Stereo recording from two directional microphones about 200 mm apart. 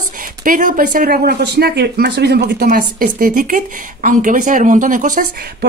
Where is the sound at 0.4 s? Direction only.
45° right (ahead or behind).